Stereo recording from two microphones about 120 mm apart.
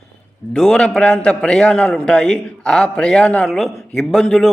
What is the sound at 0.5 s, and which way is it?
A man's voice, 5° left (ahead or behind).